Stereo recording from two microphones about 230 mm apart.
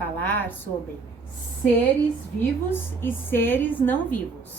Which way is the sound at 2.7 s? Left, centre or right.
Centre.